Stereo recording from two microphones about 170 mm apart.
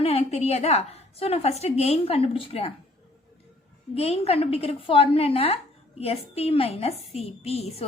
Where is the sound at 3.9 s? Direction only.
35° left (ahead or behind).